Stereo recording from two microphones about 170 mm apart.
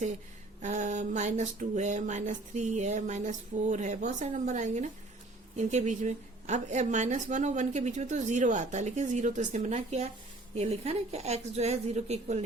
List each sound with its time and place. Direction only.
0.6 s a woman's voice: 45° right (ahead or behind)